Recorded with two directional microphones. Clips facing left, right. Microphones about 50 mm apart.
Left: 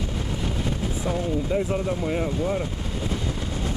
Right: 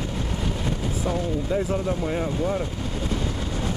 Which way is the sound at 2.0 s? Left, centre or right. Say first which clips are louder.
Even; centre.